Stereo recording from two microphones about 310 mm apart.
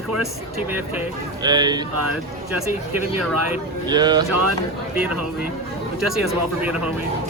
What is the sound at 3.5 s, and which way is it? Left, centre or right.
Speech, centre.